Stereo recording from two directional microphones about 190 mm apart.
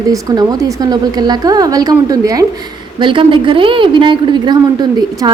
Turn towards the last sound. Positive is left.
turn(degrees=-25)  # may be behind; listen again after turning